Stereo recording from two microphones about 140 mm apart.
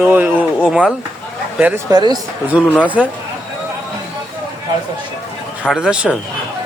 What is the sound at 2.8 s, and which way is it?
Speech, 10° right (ahead or behind).